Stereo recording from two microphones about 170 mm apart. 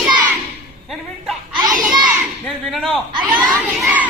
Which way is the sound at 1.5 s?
30° right (ahead or behind).